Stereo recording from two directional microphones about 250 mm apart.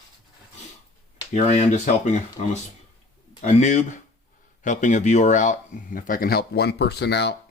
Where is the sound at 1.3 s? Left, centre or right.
Left.